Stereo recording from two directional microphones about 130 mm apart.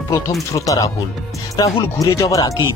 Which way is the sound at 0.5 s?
25° left (ahead or behind).